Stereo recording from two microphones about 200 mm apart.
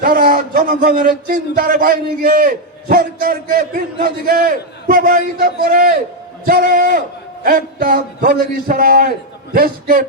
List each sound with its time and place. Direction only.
0.0 s a man's voice: 45° right (ahead or behind)